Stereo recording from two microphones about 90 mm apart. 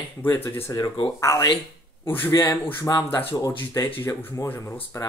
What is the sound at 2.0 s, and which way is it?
Speech, 25° left (ahead or behind).